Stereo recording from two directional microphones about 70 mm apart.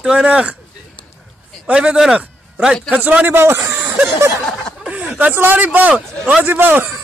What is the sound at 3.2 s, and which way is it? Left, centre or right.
Speech, right.